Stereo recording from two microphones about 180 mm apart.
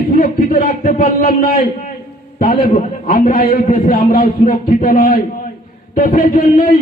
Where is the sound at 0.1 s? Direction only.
45° left (ahead or behind).